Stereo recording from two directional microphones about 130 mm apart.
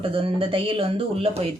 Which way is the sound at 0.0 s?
45° right (ahead or behind).